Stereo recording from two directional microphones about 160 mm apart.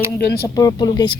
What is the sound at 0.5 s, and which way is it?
Speech, 25° left (ahead or behind).